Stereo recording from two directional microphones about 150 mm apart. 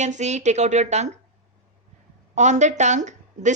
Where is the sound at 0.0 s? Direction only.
50° right (ahead or behind).